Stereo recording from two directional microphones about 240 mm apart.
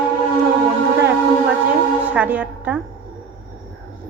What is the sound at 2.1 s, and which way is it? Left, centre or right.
Speech, centre.